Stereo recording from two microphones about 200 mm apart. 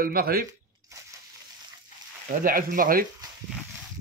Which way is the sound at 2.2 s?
45° right (ahead or behind).